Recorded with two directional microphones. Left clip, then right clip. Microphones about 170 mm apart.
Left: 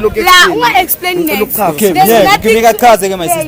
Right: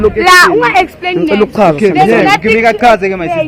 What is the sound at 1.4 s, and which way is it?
Speech, 40° right (ahead or behind).